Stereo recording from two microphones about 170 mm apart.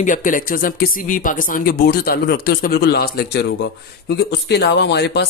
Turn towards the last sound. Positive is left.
turn(degrees=80)